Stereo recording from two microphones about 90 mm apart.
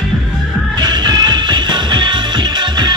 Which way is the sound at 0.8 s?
55° right (ahead or behind).